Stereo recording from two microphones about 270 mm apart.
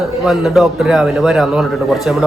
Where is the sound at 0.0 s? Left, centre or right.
Centre.